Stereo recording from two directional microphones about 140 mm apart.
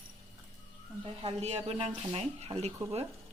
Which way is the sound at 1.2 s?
50° right (ahead or behind).